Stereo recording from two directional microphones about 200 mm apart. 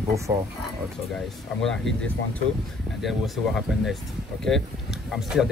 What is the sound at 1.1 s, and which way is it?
Speech, centre (ahead or behind).